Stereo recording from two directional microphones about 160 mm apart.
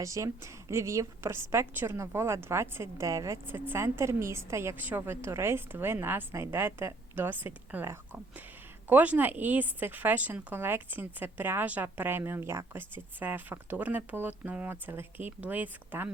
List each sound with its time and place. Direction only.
0.0 s a woman's voice: 20° right (ahead or behind)